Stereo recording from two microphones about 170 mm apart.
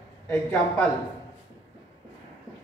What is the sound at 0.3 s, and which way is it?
Speech, 5° left (ahead or behind).